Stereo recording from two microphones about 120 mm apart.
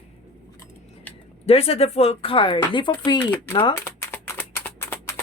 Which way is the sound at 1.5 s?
55° left (ahead or behind).